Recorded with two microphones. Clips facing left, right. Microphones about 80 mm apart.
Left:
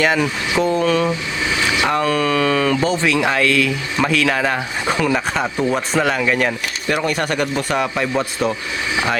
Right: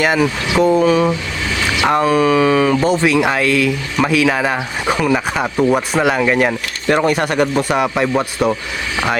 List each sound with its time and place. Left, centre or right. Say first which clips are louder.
0.0 s speech: right 2 dB; centre